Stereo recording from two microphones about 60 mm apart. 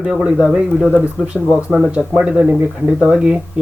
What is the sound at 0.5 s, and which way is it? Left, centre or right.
Speech, right.